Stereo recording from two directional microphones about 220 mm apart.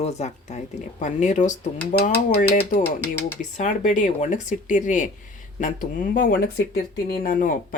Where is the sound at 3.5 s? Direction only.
35° left (ahead or behind).